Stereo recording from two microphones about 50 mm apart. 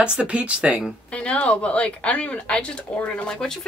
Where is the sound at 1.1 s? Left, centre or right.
Left.